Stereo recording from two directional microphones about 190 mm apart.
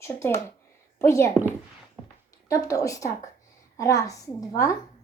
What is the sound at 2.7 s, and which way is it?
A woman's voice, 15° left (ahead or behind).